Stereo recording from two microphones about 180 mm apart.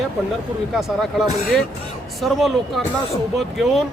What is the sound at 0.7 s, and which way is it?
Speech, centre (ahead or behind).